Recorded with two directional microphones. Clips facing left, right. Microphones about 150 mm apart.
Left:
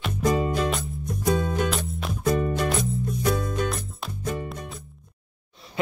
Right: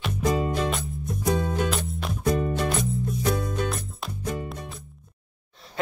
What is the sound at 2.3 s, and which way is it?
Music, 15° right (ahead or behind).